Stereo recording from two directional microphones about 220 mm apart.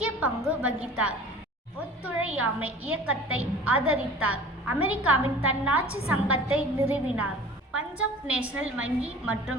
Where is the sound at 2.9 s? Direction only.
70° right (ahead or behind).